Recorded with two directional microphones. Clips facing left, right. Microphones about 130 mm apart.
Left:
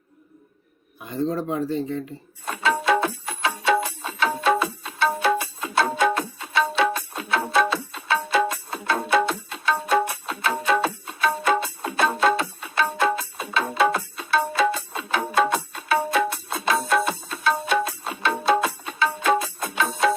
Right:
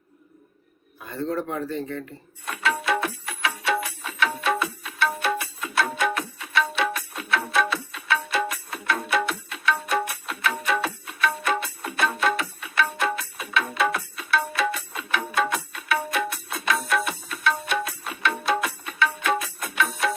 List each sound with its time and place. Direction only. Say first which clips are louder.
1.0 s speech: left 3 dB; 20° left (ahead or behind)
2.4 s music: left 3 dB; 30° left (ahead or behind)